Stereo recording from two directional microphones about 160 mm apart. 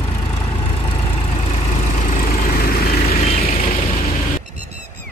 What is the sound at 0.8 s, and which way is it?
Vehicle, 30° left (ahead or behind).